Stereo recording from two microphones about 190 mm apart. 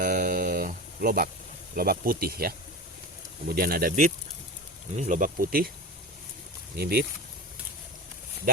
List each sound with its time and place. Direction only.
0.0 s a sound: 45° right (ahead or behind)
1.7 s speech: 50° right (ahead or behind)
3.5 s speech: 50° right (ahead or behind)
6.7 s speech: 55° right (ahead or behind)